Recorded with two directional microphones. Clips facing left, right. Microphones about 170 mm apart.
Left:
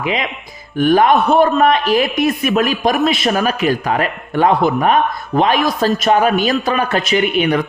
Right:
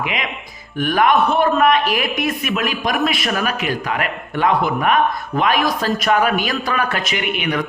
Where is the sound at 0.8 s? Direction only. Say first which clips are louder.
Left 4 dB; 30° left (ahead or behind).